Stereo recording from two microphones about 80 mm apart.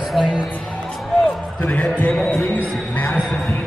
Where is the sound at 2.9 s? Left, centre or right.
Left.